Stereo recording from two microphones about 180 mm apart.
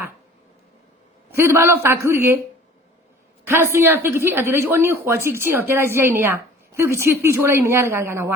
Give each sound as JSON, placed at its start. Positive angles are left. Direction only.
{"t": 1.3, "sound": "a woman's voice", "side_deg": -15}
{"t": 3.4, "sound": "a woman's voice", "side_deg": -15}